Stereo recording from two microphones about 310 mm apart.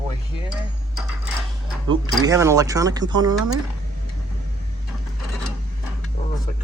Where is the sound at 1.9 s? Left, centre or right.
Centre.